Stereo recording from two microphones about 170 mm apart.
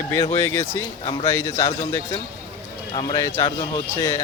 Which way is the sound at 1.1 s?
25° left (ahead or behind).